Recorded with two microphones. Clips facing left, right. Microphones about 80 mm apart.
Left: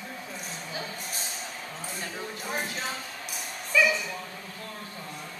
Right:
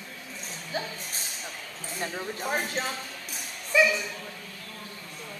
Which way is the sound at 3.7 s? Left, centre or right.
Centre.